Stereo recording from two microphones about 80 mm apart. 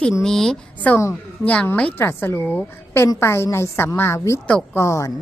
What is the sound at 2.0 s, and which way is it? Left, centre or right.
A woman's voice, left.